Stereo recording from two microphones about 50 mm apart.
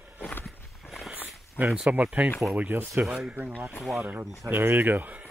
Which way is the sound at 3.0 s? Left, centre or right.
Centre.